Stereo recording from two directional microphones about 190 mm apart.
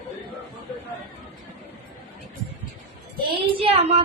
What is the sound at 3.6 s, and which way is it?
Child singing, 30° right (ahead or behind).